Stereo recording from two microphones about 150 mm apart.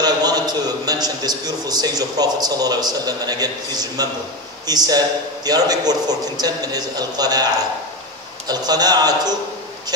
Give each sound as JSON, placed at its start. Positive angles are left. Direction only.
{"t": 0.0, "sound": "a man's voice", "side_deg": -25}
{"t": 8.5, "sound": "a man's voice", "side_deg": -25}